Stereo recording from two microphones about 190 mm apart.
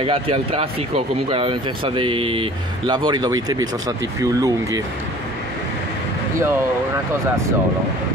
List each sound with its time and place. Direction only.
0.0 s speech: 30° right (ahead or behind)